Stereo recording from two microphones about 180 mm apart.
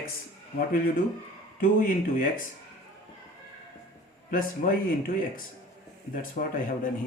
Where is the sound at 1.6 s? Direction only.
50° left (ahead or behind).